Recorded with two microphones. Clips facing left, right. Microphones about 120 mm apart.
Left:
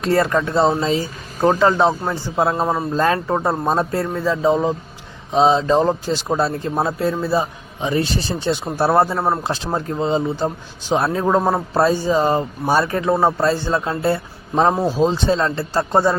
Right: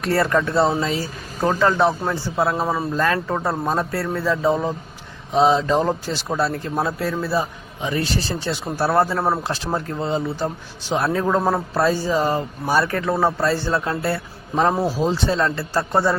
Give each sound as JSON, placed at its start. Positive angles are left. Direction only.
{"t": 0.0, "sound": "a man's voice", "side_deg": 20}
{"t": 9.1, "sound": "speech", "side_deg": 0}
{"t": 9.4, "sound": "a man's voice", "side_deg": 20}